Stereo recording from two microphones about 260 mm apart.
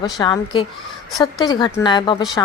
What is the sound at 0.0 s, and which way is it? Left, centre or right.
Speech, centre.